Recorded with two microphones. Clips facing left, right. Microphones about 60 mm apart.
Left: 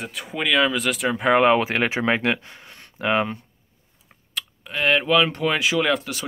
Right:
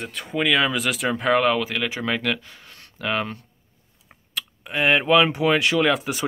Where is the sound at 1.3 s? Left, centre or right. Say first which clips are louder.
Left 3 dB; left.